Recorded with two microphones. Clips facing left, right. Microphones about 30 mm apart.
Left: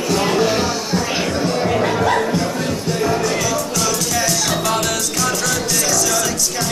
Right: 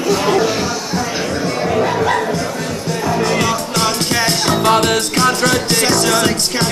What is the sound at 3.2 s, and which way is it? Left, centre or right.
Music, right.